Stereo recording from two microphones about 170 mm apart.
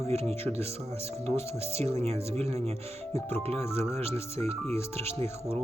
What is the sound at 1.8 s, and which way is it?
Speech, 35° right (ahead or behind).